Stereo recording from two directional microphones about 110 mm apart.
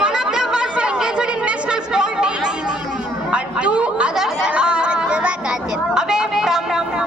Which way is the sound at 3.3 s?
10° right (ahead or behind).